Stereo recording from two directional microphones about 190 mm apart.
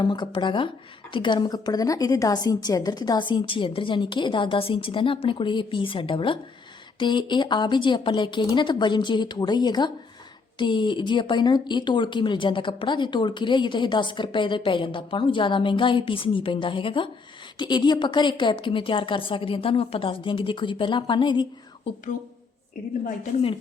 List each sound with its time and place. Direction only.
0.0 s speech: 25° left (ahead or behind)
23.0 s a woman's voice: 35° left (ahead or behind)